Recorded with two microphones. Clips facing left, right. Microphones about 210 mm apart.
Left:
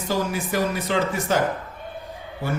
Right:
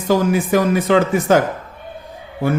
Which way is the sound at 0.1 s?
75° right (ahead or behind).